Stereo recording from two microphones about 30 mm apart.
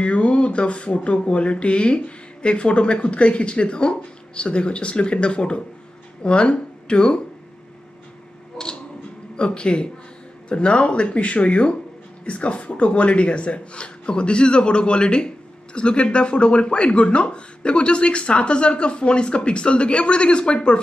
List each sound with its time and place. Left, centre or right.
0.0 s speech: left
8.6 s tick: left
9.4 s speech: left